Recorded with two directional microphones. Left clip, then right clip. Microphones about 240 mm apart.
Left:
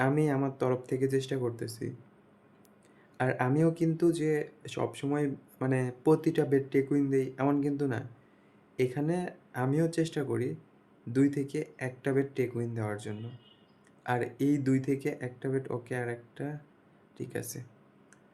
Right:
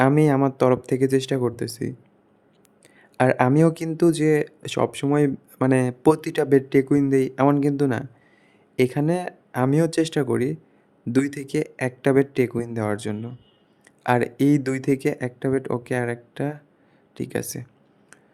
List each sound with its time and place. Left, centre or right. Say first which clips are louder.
0.0 s speech: right 10 dB; right
3.2 s speech: right 11 dB; right